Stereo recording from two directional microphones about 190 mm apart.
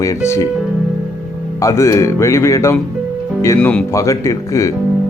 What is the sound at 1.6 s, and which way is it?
Speech, 15° left (ahead or behind).